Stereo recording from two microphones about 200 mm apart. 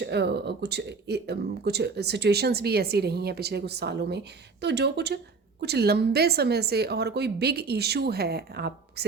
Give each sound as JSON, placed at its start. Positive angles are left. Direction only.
{"t": 0.0, "sound": "speech", "side_deg": -55}